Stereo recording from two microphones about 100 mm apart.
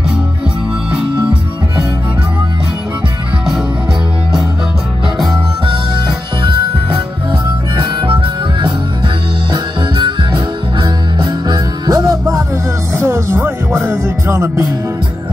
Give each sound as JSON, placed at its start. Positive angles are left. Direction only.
{"t": 5.7, "sound": "music", "side_deg": -50}
{"t": 7.7, "sound": "harmonica", "side_deg": -50}
{"t": 12.9, "sound": "music", "side_deg": -25}